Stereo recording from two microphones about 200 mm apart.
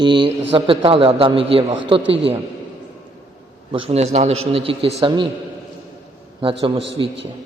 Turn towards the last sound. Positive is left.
turn(degrees=-25)  # may be behind; listen again after turning